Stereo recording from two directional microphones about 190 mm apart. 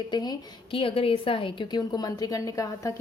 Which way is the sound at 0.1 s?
20° left (ahead or behind).